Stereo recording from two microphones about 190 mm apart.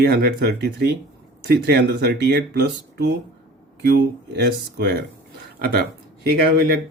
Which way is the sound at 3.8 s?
55° right (ahead or behind).